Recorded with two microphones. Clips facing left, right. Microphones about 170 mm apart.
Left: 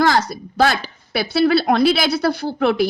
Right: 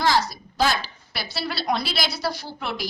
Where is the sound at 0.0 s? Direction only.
55° left (ahead or behind).